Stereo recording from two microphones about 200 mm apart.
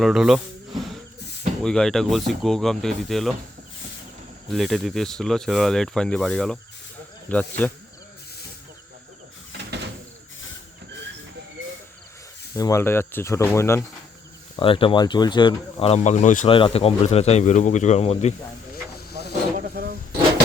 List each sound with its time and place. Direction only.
0.0 s speech: centre (ahead or behind)
4.5 s speech: centre (ahead or behind)
9.5 s a sound: 55° right (ahead or behind)
12.5 s speech: 15° left (ahead or behind)
14.5 s speech: 25° left (ahead or behind)
16.5 s speech: 25° left (ahead or behind)
19.5 s wild animals: 45° right (ahead or behind)